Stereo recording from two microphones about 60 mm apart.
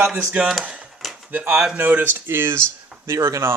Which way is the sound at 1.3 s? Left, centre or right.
Right.